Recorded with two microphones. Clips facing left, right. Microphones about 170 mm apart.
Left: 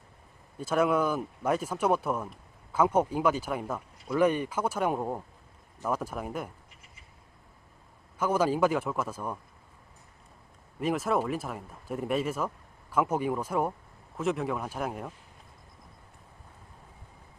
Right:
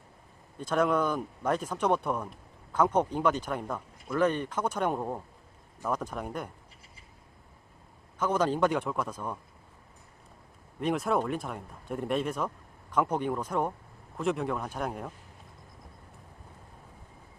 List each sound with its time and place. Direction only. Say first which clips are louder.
0.6 s speech: left 1 dB; 5° left (ahead or behind)
8.2 s speech: left 1 dB; 10° left (ahead or behind)
10.8 s speech: even; centre (ahead or behind)